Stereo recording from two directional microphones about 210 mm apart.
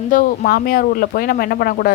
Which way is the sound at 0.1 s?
40° left (ahead or behind).